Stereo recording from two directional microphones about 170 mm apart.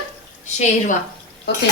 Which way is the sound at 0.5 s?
45° left (ahead or behind).